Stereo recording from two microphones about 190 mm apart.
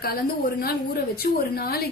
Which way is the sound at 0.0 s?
55° left (ahead or behind).